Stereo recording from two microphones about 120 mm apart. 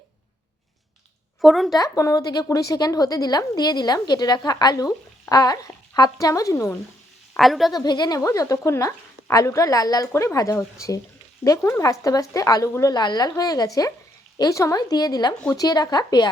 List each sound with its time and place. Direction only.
1.4 s speech: centre (ahead or behind)
1.7 s a woman's voice: 30° left (ahead or behind)
7.3 s speech: centre (ahead or behind)
7.7 s a woman's voice: 35° left (ahead or behind)